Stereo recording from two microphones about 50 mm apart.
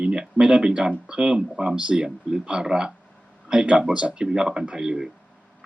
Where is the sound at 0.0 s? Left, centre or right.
Right.